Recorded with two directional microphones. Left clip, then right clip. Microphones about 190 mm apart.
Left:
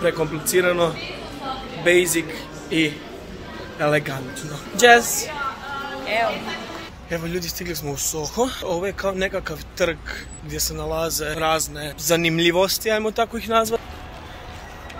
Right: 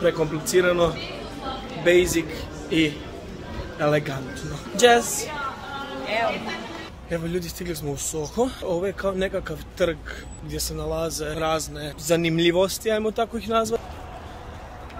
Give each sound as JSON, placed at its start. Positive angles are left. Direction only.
{"t": 0.0, "sound": "a man's voice", "side_deg": -10}
{"t": 4.7, "sound": "speech", "side_deg": 15}
{"t": 7.1, "sound": "speech", "side_deg": -10}